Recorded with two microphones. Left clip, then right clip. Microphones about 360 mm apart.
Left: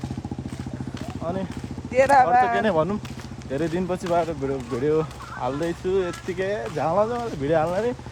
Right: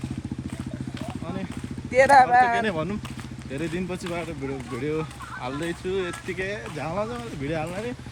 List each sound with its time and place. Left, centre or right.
1.9 s speech: right
2.6 s speech: centre